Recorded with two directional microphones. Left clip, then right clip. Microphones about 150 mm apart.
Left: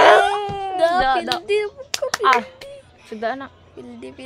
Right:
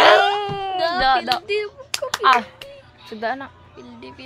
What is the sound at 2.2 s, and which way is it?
Speech, 15° right (ahead or behind).